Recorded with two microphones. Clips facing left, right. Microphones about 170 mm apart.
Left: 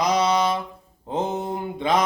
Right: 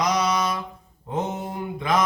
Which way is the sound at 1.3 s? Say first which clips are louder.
Left 3 dB; 25° left (ahead or behind).